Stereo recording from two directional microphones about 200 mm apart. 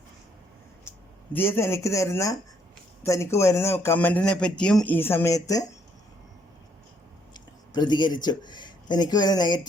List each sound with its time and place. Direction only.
1.3 s speech: 10° left (ahead or behind)
7.3 s speech: 20° left (ahead or behind)